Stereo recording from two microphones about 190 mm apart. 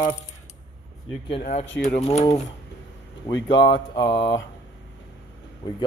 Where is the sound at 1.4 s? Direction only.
40° left (ahead or behind).